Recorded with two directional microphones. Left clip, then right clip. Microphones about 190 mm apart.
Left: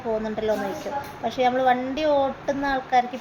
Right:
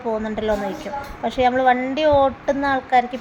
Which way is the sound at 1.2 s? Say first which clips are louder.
Right 4 dB; 15° right (ahead or behind).